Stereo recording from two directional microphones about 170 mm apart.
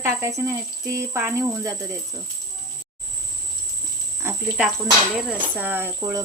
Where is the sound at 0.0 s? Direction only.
15° right (ahead or behind).